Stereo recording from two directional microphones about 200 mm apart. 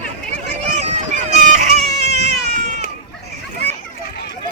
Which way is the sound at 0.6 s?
35° right (ahead or behind).